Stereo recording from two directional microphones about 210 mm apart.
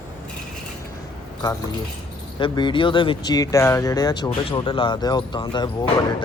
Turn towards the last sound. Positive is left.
turn(degrees=25)  # may be behind; listen again after turning